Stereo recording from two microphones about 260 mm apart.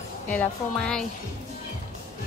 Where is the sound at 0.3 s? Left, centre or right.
Centre.